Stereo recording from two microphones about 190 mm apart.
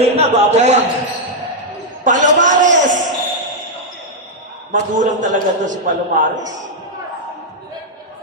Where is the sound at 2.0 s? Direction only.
40° right (ahead or behind).